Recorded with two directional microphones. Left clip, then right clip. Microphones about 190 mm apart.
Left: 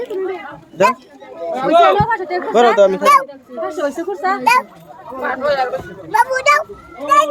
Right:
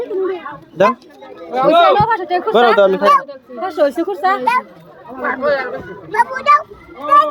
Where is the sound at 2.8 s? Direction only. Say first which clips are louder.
Even; 15° right (ahead or behind).